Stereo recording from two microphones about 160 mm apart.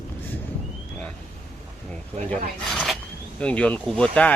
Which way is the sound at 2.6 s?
Centre (ahead or behind).